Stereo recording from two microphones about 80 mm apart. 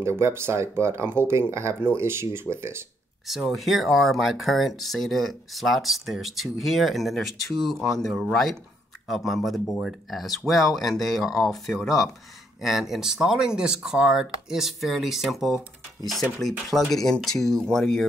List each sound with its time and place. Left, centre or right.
0.0 s speech: right
3.3 s speech: centre